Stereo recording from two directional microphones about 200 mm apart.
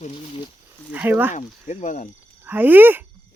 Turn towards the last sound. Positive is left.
turn(degrees=-10)  # may be behind; listen again after turning